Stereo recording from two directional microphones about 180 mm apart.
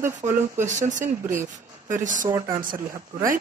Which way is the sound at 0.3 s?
15° right (ahead or behind).